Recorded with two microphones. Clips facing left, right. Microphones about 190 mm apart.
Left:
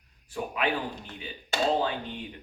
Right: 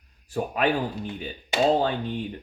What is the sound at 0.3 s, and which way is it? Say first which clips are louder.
Speech: right 5 dB; 40° right (ahead or behind).